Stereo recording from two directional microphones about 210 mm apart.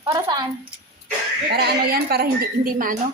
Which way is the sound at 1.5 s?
50° right (ahead or behind).